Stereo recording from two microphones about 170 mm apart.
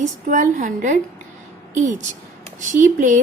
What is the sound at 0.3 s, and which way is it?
A woman's voice, 45° right (ahead or behind).